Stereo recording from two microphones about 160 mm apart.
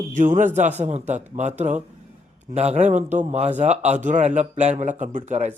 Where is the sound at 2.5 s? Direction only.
45° right (ahead or behind).